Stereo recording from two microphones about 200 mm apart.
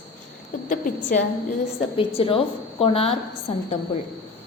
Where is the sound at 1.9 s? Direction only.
30° left (ahead or behind).